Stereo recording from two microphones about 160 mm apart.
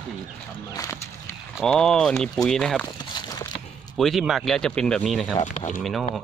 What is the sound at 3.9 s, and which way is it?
Speech, centre (ahead or behind).